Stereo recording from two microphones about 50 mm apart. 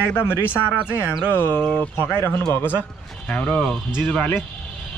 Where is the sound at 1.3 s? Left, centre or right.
Left.